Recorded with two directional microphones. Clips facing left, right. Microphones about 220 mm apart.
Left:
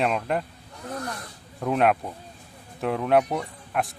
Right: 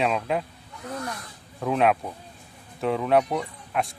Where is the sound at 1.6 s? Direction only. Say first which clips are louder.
Even; centre (ahead or behind).